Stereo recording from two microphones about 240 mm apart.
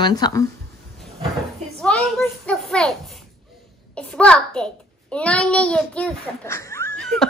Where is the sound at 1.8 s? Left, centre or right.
Centre.